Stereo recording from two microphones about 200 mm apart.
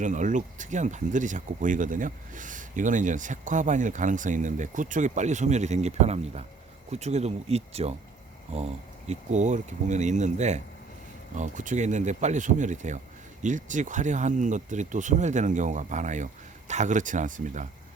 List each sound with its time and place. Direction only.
0.0 s speech: 40° right (ahead or behind)